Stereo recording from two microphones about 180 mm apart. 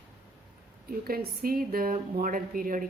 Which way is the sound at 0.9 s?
55° right (ahead or behind).